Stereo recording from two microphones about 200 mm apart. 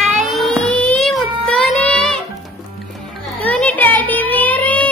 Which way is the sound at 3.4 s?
10° left (ahead or behind).